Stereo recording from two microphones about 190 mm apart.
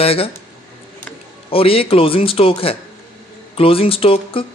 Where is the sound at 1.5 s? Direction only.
30° left (ahead or behind).